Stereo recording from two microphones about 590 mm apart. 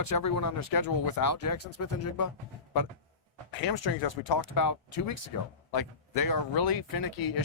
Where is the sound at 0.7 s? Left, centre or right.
Left.